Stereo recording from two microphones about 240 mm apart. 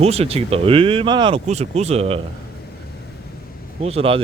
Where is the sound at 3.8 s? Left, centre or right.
Right.